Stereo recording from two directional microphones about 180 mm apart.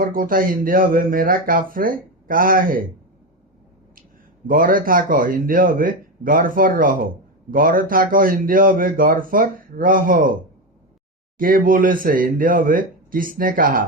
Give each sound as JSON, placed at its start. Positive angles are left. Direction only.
{"t": 0.0, "sound": "speech", "side_deg": -50}
{"t": 4.4, "sound": "speech", "side_deg": -50}
{"t": 11.3, "sound": "speech", "side_deg": -50}